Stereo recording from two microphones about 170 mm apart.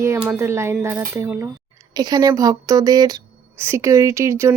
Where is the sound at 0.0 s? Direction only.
15° right (ahead or behind).